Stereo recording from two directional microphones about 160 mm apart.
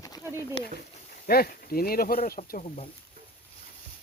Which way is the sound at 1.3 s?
70° left (ahead or behind).